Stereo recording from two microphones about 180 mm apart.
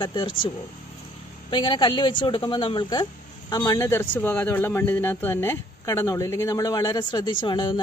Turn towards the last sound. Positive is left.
turn(degrees=25)  # may be behind; listen again after turning